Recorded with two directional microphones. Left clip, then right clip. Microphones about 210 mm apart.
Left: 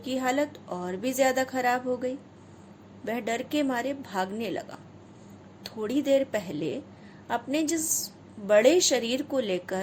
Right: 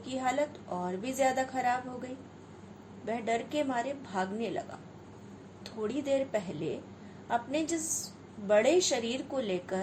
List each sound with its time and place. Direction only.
0.0 s a woman's voice: 50° left (ahead or behind)
3.1 s a woman's voice: 50° left (ahead or behind)